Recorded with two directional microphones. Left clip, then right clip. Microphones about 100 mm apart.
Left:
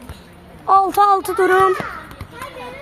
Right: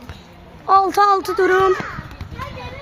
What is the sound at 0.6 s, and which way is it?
Speech, 15° right (ahead or behind).